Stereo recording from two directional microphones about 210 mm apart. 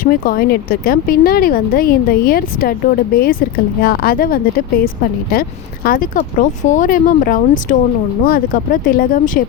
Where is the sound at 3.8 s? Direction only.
45° left (ahead or behind).